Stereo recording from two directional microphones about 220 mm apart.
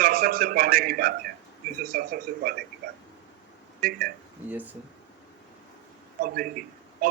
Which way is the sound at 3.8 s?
40° right (ahead or behind).